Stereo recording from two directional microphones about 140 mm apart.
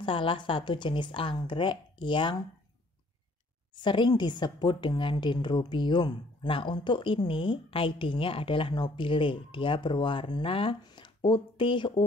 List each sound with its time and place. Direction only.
0.0 s a woman's voice: 40° left (ahead or behind)
3.7 s a woman's voice: 35° left (ahead or behind)